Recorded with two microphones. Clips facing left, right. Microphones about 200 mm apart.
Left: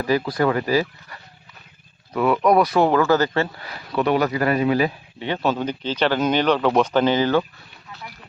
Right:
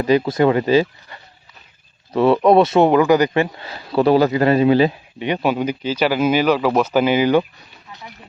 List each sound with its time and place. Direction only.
0.0 s speech: 20° right (ahead or behind)
5.2 s speech: 15° right (ahead or behind)